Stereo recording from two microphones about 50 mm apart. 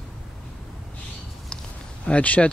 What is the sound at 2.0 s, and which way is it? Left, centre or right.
Speech, left.